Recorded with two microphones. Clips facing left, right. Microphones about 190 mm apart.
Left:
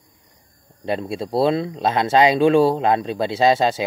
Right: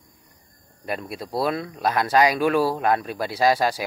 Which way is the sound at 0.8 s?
25° left (ahead or behind).